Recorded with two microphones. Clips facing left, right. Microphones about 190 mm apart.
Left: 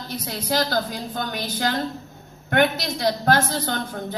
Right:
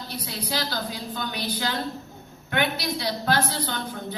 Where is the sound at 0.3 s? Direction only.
45° left (ahead or behind).